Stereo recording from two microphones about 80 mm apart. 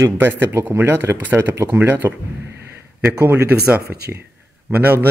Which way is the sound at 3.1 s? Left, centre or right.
Right.